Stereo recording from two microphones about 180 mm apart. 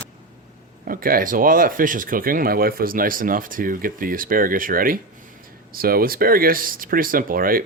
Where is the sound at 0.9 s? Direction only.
55° right (ahead or behind).